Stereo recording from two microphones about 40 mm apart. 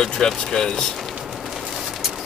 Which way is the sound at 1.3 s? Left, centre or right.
Centre.